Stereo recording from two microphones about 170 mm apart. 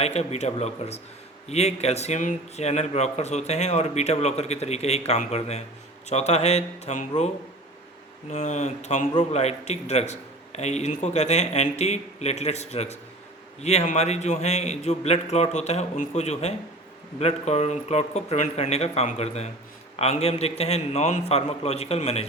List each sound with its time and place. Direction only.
0.0 s a man's voice: 40° left (ahead or behind)
8.3 s a man's voice: 40° left (ahead or behind)